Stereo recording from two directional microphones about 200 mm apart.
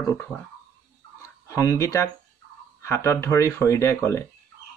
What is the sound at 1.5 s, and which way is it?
Speech, 15° left (ahead or behind).